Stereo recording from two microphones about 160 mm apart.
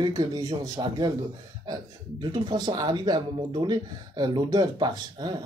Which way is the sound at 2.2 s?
30° right (ahead or behind).